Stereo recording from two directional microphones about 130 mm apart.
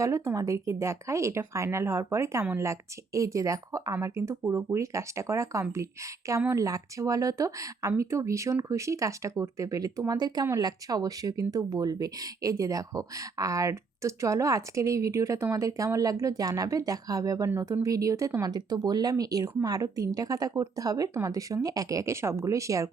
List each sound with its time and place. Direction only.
0.0 s speech: 25° right (ahead or behind)